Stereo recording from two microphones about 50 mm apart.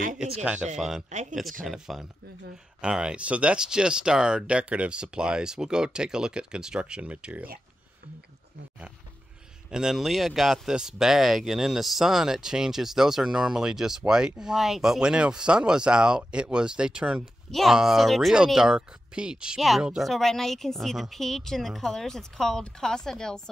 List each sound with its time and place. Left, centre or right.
0.2 s speech: right
0.7 s speech: centre
2.8 s speech: centre
3.5 s speech: centre
4.5 s speech: right
9.7 s speech: centre
17.5 s speech: centre
18.3 s speech: centre
20.0 s a woman's voice: centre